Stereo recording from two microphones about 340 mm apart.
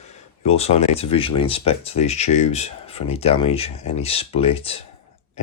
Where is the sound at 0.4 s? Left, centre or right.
Centre.